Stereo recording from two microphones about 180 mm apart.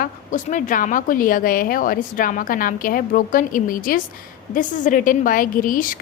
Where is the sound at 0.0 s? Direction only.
45° left (ahead or behind).